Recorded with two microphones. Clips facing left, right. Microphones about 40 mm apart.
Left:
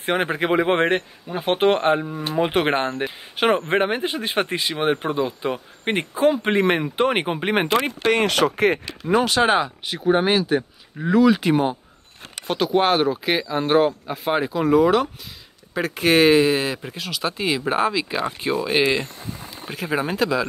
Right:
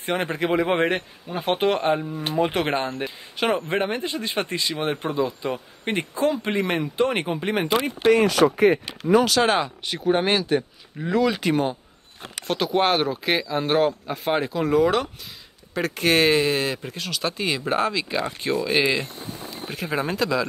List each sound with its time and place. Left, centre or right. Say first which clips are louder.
0.2 s speech: left 1 dB; left
1.7 s speech: left 3 dB; left
4.1 s speech: left 3 dB; left
7.7 s speech: right 5 dB; left
9.1 s speech: even; left
9.6 s speech: left 2 dB; centre